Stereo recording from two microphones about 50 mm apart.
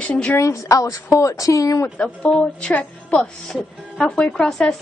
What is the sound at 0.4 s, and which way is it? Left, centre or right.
Speech, left.